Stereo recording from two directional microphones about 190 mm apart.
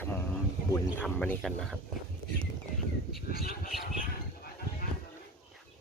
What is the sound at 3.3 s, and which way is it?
Speech, 55° left (ahead or behind).